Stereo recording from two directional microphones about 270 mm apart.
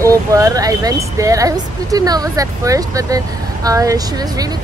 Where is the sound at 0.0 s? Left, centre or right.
Centre.